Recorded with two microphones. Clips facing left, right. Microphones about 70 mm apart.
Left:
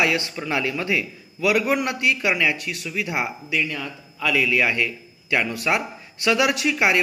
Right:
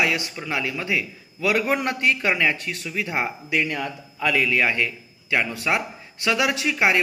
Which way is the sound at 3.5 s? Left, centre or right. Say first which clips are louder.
Right 2 dB; right.